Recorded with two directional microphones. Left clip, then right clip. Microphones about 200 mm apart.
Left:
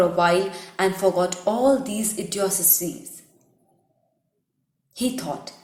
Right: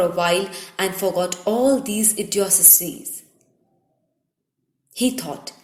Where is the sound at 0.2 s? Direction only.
35° right (ahead or behind).